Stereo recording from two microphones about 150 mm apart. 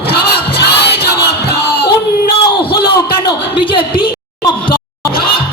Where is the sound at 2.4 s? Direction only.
35° left (ahead or behind).